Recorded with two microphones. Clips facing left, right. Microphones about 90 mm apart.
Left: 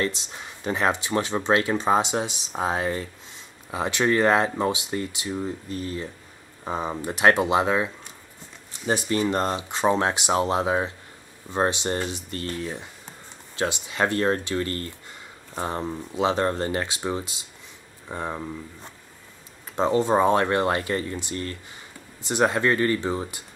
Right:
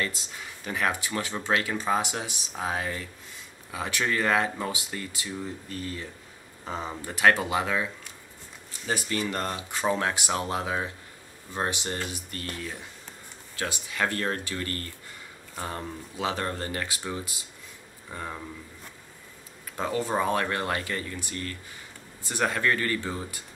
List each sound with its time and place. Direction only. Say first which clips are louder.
0.0 s speech: left 5 dB; 25° left (ahead or behind)